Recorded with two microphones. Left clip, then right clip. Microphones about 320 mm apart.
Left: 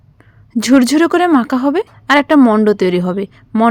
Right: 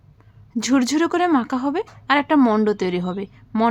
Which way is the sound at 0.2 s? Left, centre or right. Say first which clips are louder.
Left 7 dB; centre.